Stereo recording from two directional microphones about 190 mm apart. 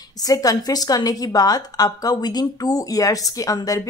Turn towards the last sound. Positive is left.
turn(degrees=20)  # may be behind; listen again after turning